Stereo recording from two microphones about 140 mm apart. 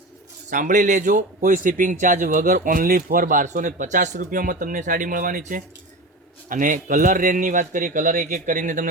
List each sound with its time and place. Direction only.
0.5 s speech: 65° right (ahead or behind)